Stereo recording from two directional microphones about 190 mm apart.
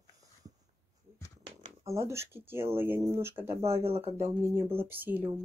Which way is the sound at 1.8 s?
15° right (ahead or behind).